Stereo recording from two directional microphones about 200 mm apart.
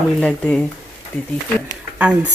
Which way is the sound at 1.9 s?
5° right (ahead or behind).